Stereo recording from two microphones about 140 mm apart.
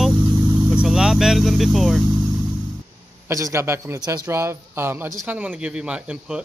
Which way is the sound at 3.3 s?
20° right (ahead or behind).